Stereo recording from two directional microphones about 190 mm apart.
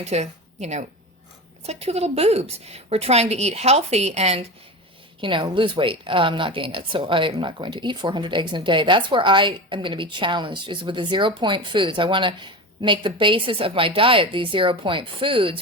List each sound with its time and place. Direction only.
0.0 s a woman's voice: 35° right (ahead or behind)